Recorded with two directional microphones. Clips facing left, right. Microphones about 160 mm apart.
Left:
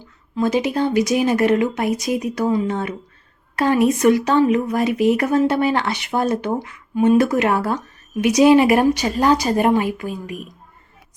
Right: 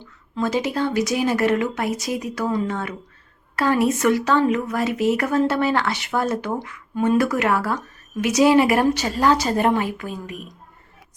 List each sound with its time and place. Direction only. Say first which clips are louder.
0.3 s speech: left 3 dB; 15° left (ahead or behind)